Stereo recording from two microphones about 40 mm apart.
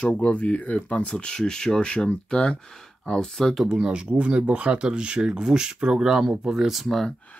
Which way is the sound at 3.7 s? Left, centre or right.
Right.